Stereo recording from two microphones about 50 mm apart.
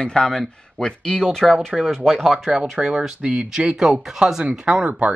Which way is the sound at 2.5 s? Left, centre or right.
Centre.